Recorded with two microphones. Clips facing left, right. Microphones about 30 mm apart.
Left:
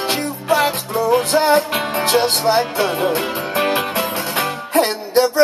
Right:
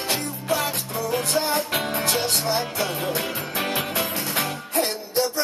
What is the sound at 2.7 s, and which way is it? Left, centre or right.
Music, left.